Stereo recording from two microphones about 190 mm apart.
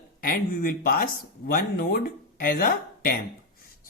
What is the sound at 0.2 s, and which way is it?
Speech, 45° left (ahead or behind).